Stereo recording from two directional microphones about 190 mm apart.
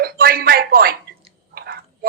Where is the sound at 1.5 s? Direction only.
55° right (ahead or behind).